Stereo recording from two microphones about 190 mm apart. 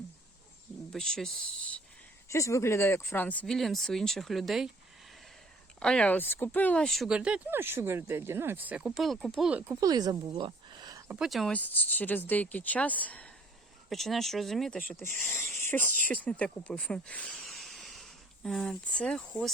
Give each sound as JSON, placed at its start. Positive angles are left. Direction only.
{"t": 0.9, "sound": "speech", "side_deg": 5}
{"t": 2.3, "sound": "speech", "side_deg": 15}
{"t": 5.8, "sound": "speech", "side_deg": 5}
{"t": 9.8, "sound": "speech", "side_deg": -20}
{"t": 11.1, "sound": "speech", "side_deg": 0}